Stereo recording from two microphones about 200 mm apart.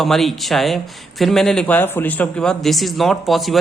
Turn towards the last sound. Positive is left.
turn(degrees=0)  # may be behind; listen again after turning